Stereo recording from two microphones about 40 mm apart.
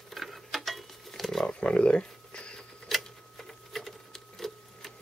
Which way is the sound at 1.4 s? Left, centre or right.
Left.